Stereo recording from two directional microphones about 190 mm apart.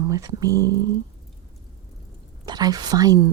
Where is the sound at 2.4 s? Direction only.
20° right (ahead or behind).